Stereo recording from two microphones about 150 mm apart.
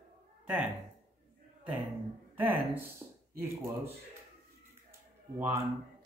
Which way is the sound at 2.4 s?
15° right (ahead or behind).